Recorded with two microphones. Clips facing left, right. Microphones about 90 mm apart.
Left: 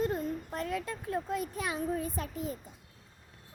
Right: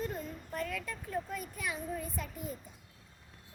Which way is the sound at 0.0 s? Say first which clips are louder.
Left 7 dB; 35° left (ahead or behind).